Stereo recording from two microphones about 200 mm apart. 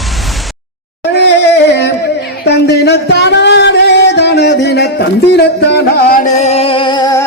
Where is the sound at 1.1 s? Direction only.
60° left (ahead or behind).